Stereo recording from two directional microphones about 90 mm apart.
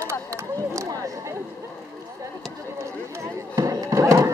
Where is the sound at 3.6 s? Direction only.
35° right (ahead or behind).